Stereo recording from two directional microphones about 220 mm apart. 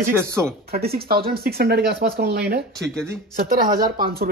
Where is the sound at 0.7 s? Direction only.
45° right (ahead or behind).